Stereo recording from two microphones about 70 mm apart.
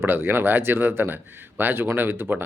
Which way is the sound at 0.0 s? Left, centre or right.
Right.